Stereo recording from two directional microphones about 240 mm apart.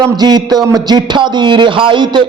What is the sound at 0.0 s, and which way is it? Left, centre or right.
A man's voice, centre.